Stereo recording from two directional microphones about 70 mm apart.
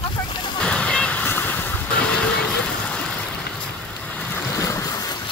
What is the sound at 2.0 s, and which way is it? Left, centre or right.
Music, centre.